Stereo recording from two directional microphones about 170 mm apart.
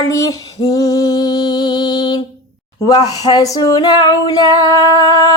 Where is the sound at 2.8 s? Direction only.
20° left (ahead or behind).